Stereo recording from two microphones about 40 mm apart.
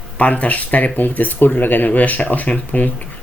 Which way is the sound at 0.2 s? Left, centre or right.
Left.